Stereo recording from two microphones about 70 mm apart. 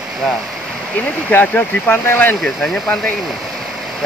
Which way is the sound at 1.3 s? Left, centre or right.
Left.